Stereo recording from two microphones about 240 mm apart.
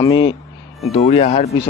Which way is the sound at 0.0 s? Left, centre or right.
Centre.